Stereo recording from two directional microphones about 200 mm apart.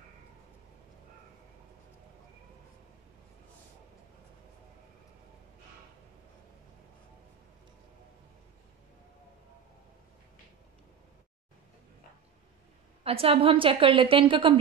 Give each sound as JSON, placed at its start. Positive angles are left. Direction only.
{"t": 13.0, "sound": "a woman's voice", "side_deg": -30}